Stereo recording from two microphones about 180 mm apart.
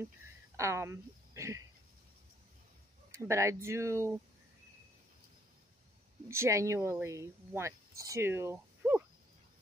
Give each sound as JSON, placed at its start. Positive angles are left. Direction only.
{"t": 0.6, "sound": "speech", "side_deg": -15}
{"t": 3.1, "sound": "speech", "side_deg": -15}
{"t": 6.2, "sound": "speech", "side_deg": -15}